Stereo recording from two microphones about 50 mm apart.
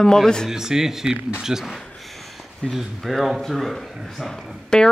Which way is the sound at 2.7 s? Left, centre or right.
Centre.